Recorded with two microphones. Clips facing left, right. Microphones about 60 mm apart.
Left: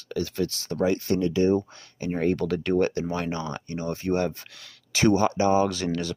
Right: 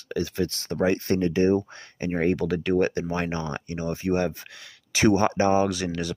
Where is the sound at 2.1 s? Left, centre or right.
Centre.